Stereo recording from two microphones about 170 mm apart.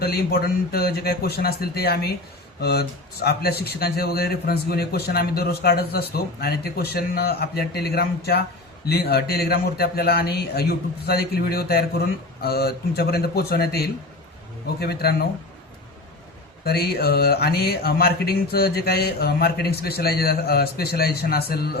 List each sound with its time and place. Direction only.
0.0 s a man's voice: 70° left (ahead or behind)
16.6 s a man's voice: 65° left (ahead or behind)